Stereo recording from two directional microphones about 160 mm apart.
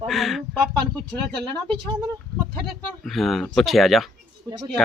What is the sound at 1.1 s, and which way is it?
Speech, 30° right (ahead or behind).